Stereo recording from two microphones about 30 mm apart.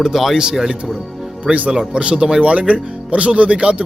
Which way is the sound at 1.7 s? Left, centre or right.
Right.